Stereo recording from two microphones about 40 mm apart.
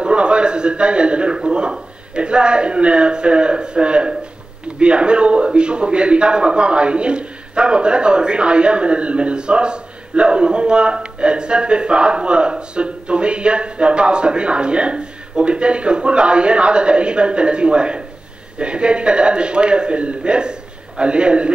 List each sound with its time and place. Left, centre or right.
0.0 s a man's voice: right